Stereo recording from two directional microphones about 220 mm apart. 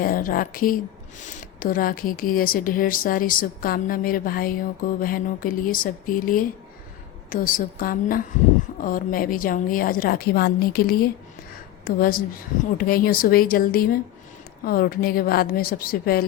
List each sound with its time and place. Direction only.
0.0 s a woman's voice: 40° left (ahead or behind)